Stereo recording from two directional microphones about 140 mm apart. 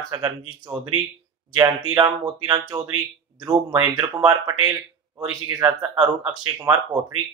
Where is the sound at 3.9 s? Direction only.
30° right (ahead or behind).